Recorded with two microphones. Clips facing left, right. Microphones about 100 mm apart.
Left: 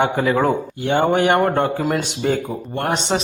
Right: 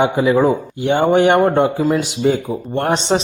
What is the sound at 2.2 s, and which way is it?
Speech, 20° right (ahead or behind).